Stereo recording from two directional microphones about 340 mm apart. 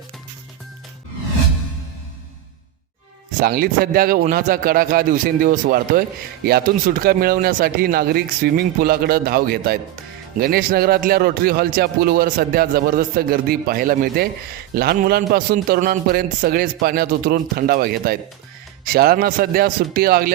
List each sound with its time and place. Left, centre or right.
3.4 s speech: right